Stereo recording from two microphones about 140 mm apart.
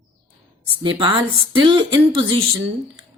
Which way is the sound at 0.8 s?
35° right (ahead or behind).